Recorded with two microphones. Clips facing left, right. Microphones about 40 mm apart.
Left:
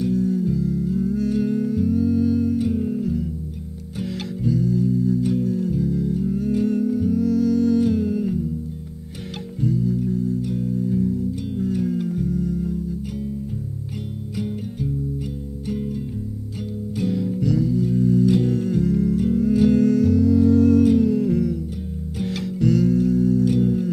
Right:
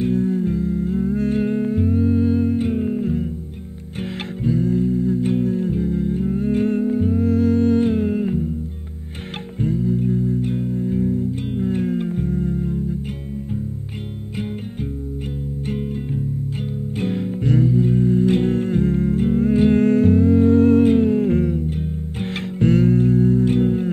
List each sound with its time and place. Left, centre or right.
0.0 s music: right
4.5 s music: right
9.6 s music: right
17.0 s music: right